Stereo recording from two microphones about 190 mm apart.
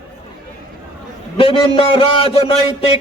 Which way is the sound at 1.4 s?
30° left (ahead or behind).